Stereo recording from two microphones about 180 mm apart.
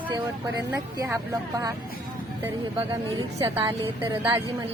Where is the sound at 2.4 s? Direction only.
20° right (ahead or behind).